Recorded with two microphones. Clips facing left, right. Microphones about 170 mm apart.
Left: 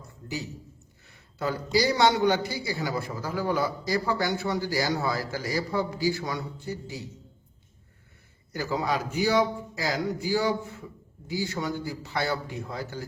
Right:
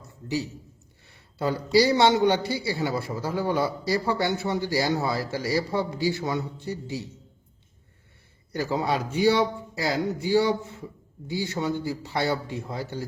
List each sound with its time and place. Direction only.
1.0 s a man's voice: 30° right (ahead or behind)
8.5 s a man's voice: 30° right (ahead or behind)